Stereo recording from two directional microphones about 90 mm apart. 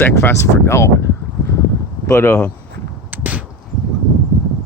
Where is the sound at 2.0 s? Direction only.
30° left (ahead or behind).